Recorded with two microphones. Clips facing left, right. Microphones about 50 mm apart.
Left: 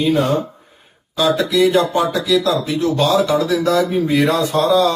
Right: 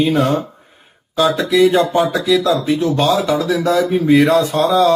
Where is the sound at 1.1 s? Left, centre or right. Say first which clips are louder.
Right 1 dB; right.